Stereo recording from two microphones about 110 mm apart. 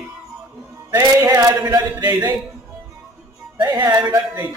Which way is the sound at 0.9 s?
30° right (ahead or behind).